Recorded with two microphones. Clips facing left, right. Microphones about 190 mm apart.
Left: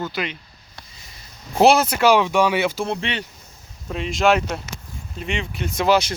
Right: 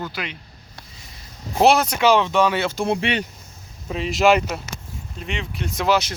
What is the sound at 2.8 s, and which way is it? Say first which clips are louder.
Speech: right 4 dB; 15° right (ahead or behind).